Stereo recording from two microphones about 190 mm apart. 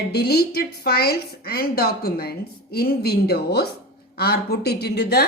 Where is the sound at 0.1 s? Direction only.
55° left (ahead or behind).